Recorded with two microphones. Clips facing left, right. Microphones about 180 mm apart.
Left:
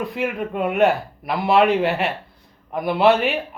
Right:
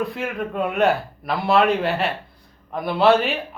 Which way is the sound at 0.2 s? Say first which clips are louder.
Left 2 dB; 10° left (ahead or behind).